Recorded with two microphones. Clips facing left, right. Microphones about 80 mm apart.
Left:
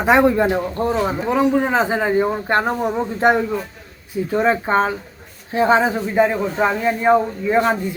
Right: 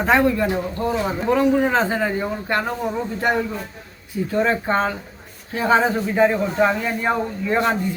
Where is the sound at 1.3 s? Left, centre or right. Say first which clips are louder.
Right 1 dB; centre.